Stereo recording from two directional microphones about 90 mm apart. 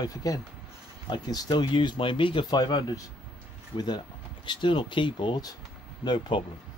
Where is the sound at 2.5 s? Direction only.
50° left (ahead or behind).